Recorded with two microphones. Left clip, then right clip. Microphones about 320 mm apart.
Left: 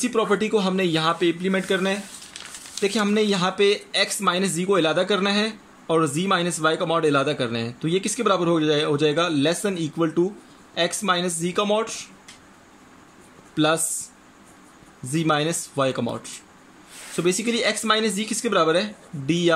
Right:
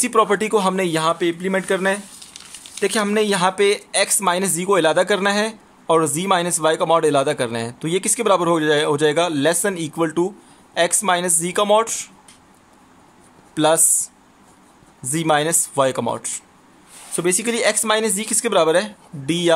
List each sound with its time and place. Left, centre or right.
0.0 s speech: right
13.6 s speech: centre